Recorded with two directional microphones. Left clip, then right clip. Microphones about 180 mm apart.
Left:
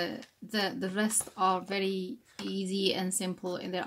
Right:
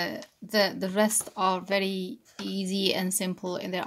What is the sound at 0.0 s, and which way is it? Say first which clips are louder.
Speech: right 3 dB; 40° right (ahead or behind).